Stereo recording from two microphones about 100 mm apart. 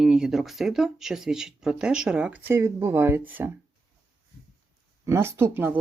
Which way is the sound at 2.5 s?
25° right (ahead or behind).